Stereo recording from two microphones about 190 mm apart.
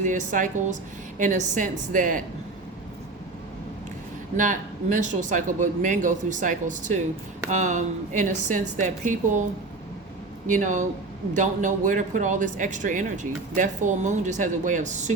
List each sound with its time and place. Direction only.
0.0 s a woman's voice: 40° right (ahead or behind)
4.4 s a woman's voice: 45° right (ahead or behind)
10.4 s a woman's voice: 40° right (ahead or behind)